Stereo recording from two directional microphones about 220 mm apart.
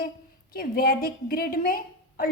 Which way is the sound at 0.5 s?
40° left (ahead or behind).